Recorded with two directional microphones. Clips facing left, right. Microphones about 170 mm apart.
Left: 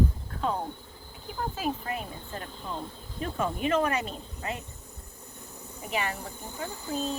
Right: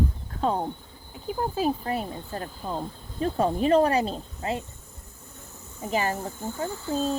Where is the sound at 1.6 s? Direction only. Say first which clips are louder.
Right 6 dB; 35° right (ahead or behind).